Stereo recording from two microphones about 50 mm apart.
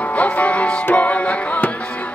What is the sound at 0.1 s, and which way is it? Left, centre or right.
Music, left.